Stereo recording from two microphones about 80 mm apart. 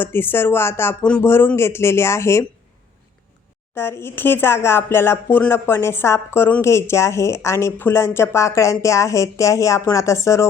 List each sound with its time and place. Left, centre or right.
0.0 s speech: left
3.8 s speech: left